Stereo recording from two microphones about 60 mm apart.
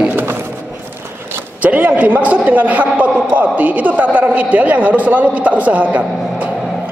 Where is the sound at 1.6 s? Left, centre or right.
Right.